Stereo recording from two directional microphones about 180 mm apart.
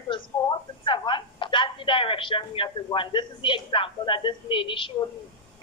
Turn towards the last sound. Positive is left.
turn(degrees=30)  # may be behind; listen again after turning